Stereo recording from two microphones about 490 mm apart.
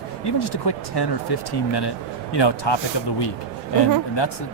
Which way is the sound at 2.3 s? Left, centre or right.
Left.